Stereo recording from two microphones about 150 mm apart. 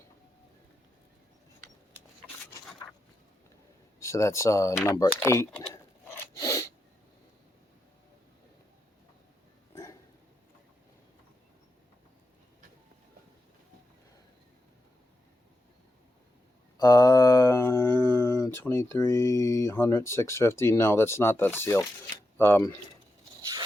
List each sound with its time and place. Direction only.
4.0 s speech: 20° left (ahead or behind)
5.7 s scissors: 20° left (ahead or behind)
16.7 s a sound: 25° left (ahead or behind)
22.4 s speech: 15° left (ahead or behind)